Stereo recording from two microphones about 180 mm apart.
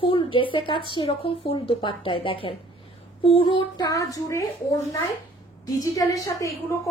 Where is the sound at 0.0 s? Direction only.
30° left (ahead or behind).